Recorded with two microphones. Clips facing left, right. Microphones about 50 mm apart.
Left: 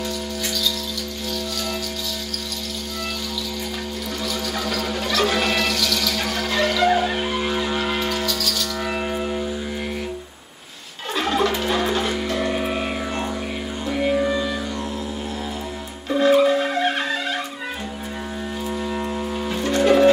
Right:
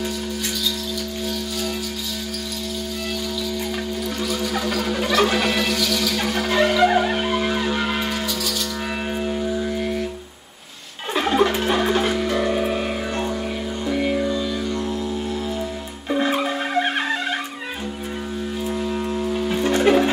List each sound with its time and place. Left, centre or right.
4.3 s a sound: centre
5.0 s music: centre
7.2 s music: centre
8.1 s music: right
11.1 s music: centre
12.2 s music: centre
16.1 s music: centre
19.1 s music: centre
19.5 s music: centre